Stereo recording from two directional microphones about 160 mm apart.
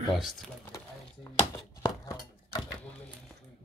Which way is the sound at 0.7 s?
20° left (ahead or behind).